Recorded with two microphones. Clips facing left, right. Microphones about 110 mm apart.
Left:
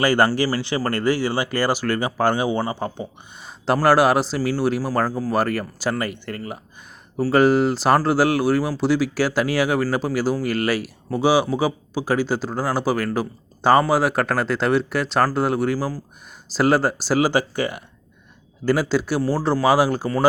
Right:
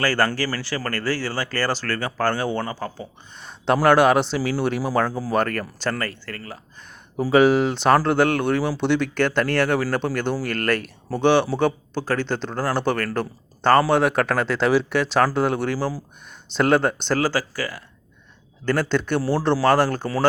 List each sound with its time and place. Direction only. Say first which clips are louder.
0.0 s speech: left 4 dB; 15° left (ahead or behind)
3.8 s speech: even; centre (ahead or behind); by 6.6 s 20° left (ahead or behind)
7.3 s speech: even; centre (ahead or behind)
17.2 s speech: left 4 dB; 15° left (ahead or behind)
18.6 s speech: left 2 dB; 10° left (ahead or behind)